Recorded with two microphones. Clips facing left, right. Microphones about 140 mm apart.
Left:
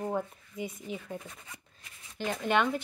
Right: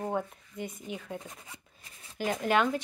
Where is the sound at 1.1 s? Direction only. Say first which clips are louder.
Even; 20° right (ahead or behind).